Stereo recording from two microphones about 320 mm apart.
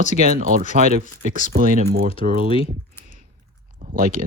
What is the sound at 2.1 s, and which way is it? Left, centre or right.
Speech, centre.